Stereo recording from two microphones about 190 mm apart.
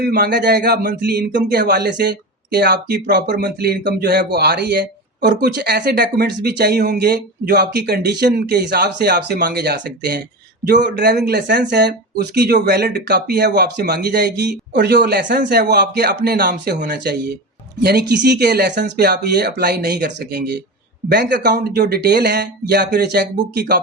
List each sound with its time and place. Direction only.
0.0 s speech: 55° right (ahead or behind)